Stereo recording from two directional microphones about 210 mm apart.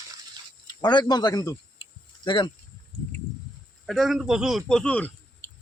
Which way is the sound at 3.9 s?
Centre (ahead or behind).